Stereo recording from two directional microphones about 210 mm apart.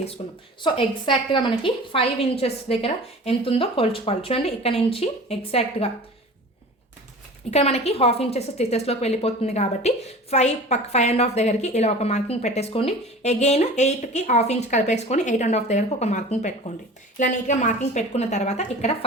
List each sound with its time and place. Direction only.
0.2 s a woman's voice: 30° left (ahead or behind)
7.5 s a woman's voice: 30° left (ahead or behind)